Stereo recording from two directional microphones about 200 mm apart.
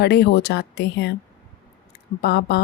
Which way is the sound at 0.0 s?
55° left (ahead or behind).